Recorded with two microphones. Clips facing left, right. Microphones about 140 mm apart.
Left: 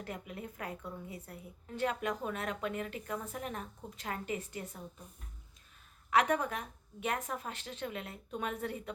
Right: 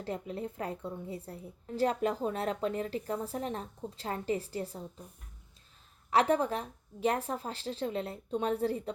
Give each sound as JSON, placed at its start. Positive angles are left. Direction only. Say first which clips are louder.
{"t": 0.0, "sound": "a woman's voice", "louder": "right 6 dB", "side_deg": -30}
{"t": 6.1, "sound": "a woman's voice", "louder": "right 3 dB", "side_deg": -30}